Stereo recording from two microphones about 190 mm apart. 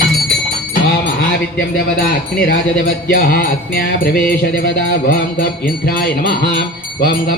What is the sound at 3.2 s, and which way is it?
Mantra, 50° left (ahead or behind).